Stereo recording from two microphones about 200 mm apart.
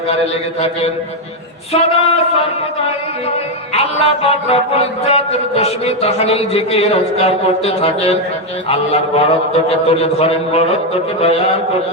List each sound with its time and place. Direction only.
1.7 s mantra: 30° left (ahead or behind)
3.8 s mantra: 30° left (ahead or behind)